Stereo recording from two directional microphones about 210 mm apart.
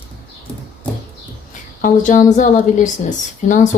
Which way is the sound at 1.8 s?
40° left (ahead or behind).